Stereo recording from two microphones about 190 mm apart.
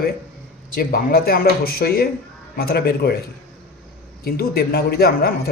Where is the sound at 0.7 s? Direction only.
50° left (ahead or behind).